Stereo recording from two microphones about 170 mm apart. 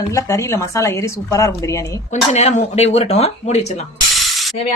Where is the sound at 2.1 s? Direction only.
40° left (ahead or behind).